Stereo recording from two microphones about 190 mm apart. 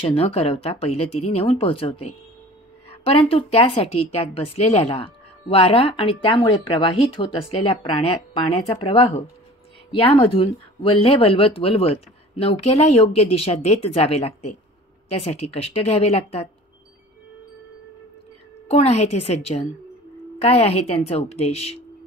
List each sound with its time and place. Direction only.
0.0 s a woman's voice: 30° left (ahead or behind)
18.7 s a woman's voice: 35° left (ahead or behind)